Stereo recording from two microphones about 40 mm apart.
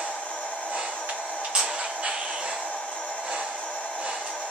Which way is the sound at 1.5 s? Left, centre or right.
Right.